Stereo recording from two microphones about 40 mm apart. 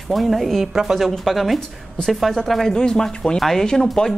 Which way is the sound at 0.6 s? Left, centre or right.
Centre.